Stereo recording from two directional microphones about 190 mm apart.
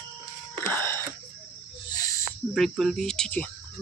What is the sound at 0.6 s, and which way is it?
Wheeze, 10° left (ahead or behind).